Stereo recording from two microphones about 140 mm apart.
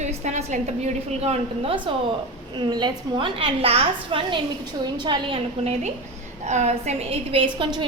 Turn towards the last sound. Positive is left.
turn(degrees=-35)  # may be behind; listen again after turning